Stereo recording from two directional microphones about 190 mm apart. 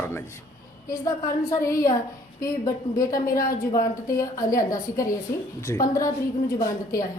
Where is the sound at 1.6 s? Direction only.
15° left (ahead or behind).